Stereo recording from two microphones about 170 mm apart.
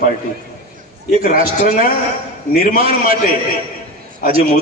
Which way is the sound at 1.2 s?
50° left (ahead or behind).